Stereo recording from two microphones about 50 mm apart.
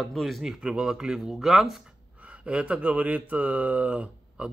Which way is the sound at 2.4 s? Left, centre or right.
Right.